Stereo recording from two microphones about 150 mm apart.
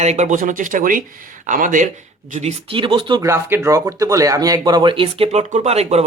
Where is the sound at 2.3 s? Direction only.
50° right (ahead or behind).